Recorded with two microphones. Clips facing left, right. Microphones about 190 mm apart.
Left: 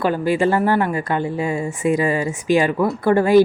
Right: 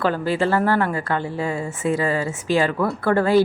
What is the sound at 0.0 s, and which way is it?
Speech, 15° left (ahead or behind).